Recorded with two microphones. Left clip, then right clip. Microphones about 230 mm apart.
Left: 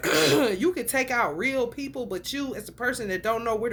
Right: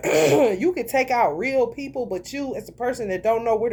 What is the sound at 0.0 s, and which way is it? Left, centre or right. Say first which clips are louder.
Speech: right 4 dB; centre.